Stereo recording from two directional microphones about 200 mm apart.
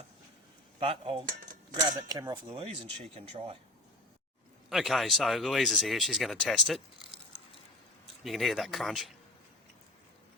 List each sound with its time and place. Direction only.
0.8 s speech: 25° right (ahead or behind)
4.7 s speech: centre (ahead or behind)
8.2 s speech: centre (ahead or behind)